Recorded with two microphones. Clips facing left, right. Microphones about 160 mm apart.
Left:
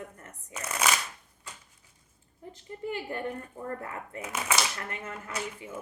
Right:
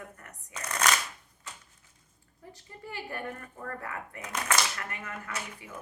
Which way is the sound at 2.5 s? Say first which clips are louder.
Left 7 dB; 20° left (ahead or behind).